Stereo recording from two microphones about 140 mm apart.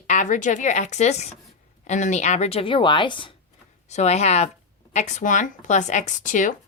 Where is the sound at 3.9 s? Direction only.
55° left (ahead or behind).